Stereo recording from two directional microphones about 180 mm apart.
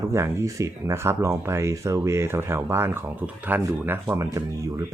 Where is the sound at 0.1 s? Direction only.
15° right (ahead or behind).